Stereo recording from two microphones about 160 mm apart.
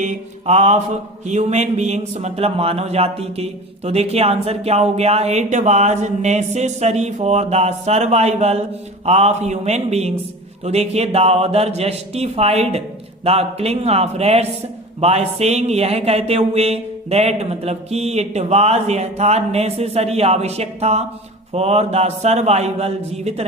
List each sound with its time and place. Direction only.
0.0 s a man's voice: 45° right (ahead or behind)